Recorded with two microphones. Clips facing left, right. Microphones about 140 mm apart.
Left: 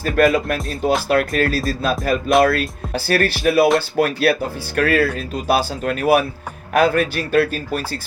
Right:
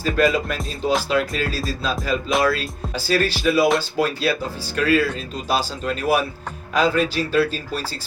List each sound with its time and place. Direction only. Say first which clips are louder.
0.0 s speech: left 3 dB; 55° left (ahead or behind)